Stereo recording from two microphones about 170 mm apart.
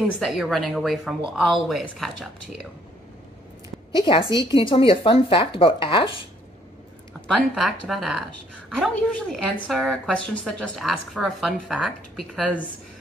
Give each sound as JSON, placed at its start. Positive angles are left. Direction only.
{"t": 0.2, "sound": "a woman's voice", "side_deg": 0}
{"t": 4.0, "sound": "speech", "side_deg": 30}
{"t": 7.2, "sound": "a woman's voice", "side_deg": 0}